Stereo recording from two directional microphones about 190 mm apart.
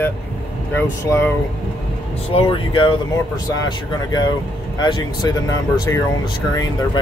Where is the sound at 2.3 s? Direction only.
25° left (ahead or behind).